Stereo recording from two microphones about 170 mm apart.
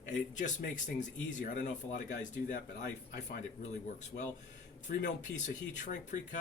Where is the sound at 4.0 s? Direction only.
45° left (ahead or behind).